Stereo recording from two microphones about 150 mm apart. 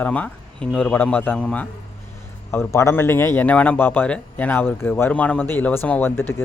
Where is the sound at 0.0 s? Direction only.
10° left (ahead or behind).